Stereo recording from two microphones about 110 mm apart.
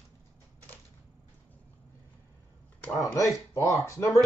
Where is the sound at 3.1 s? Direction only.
30° left (ahead or behind).